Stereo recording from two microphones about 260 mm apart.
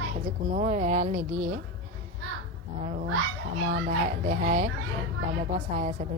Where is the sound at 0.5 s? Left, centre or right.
Right.